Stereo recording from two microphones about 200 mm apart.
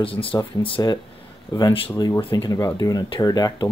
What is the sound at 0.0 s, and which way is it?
Speech, 25° left (ahead or behind).